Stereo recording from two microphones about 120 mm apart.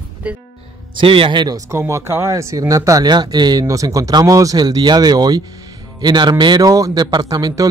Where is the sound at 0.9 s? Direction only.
50° right (ahead or behind).